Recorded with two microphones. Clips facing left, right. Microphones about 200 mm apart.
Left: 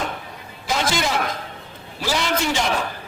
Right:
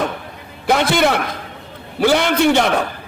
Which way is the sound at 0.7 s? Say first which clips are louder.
Right 7 dB; 60° right (ahead or behind).